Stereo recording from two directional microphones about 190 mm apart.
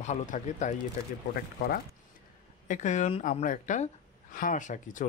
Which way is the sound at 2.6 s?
40° left (ahead or behind).